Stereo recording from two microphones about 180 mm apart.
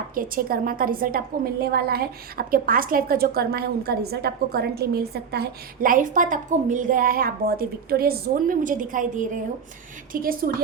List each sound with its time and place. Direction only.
0.1 s a woman's voice: 50° right (ahead or behind)